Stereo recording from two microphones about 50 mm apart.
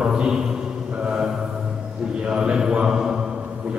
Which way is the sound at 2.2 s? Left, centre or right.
Centre.